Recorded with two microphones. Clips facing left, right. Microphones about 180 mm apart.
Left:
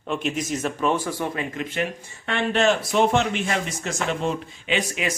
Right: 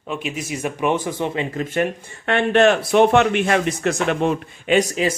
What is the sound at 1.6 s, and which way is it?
Speech, 50° right (ahead or behind).